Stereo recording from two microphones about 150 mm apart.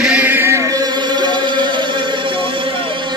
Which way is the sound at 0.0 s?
10° right (ahead or behind).